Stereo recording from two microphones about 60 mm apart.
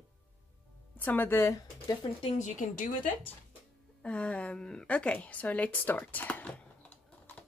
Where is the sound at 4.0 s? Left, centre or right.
Left.